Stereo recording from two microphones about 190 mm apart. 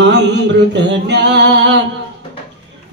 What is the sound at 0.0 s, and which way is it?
Mantra, 65° right (ahead or behind).